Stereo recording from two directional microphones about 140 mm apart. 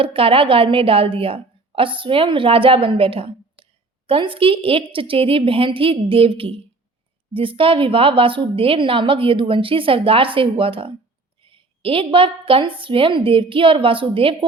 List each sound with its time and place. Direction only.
0.0 s a woman's voice: 40° right (ahead or behind)